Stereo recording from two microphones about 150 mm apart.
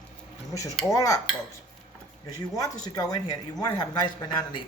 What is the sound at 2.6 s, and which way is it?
Speech, 25° left (ahead or behind).